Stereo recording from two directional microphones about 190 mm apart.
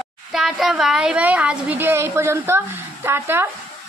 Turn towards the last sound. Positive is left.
turn(degrees=-10)  # may be behind; listen again after turning